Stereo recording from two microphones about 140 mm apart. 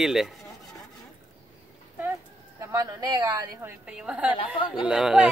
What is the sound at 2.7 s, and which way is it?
Speech, 25° right (ahead or behind).